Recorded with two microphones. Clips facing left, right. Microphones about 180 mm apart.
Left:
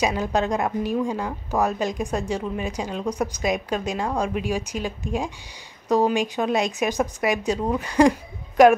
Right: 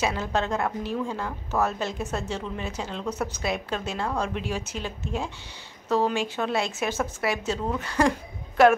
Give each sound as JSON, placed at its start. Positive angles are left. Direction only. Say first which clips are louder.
{"t": 0.0, "sound": "speech", "louder": "left 4 dB", "side_deg": 15}